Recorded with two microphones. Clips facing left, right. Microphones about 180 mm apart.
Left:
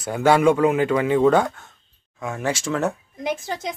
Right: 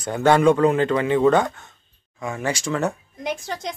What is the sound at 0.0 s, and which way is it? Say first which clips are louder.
A woman's voice: even; 10° left (ahead or behind).